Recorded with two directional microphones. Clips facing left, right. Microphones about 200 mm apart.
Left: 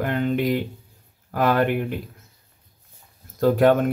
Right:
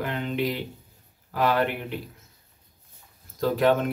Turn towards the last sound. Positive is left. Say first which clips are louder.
# left 5 dB
turn(degrees=50)  # may be behind; listen again after turning